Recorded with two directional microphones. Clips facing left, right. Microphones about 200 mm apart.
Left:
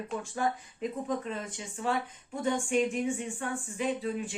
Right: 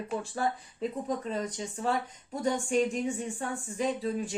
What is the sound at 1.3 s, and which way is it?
Speech, 40° right (ahead or behind).